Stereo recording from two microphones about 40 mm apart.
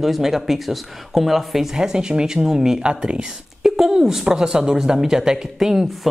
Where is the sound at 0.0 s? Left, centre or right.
Centre.